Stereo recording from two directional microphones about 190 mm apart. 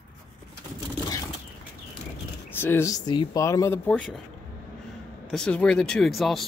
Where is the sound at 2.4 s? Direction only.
10° left (ahead or behind).